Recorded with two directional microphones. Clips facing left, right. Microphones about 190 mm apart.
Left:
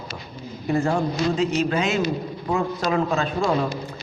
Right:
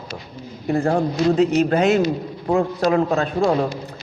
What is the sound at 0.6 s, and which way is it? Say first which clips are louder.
Speech: right 3 dB; 55° right (ahead or behind).